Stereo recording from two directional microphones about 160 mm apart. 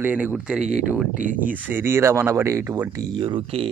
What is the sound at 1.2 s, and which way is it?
Speech, 55° right (ahead or behind).